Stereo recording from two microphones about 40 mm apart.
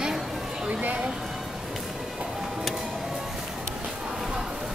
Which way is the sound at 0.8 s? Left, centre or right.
Right.